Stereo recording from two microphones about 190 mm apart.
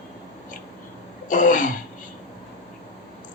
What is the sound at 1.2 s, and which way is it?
Throat clearing, 45° left (ahead or behind).